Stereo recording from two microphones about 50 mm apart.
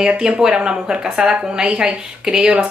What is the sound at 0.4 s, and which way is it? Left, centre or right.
A woman's voice, centre.